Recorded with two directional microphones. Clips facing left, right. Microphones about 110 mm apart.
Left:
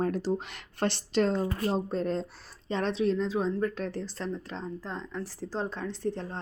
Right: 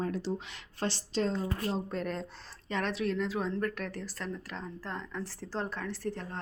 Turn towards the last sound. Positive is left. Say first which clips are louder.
# left 4 dB
turn(degrees=20)  # may be behind; listen again after turning